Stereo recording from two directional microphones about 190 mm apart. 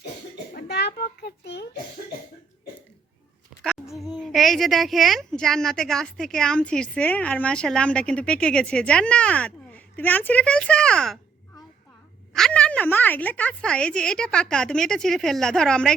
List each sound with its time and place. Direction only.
0.5 s a sound: 60° left (ahead or behind)
3.9 s speech: centre (ahead or behind)
12.3 s speech: 5° left (ahead or behind)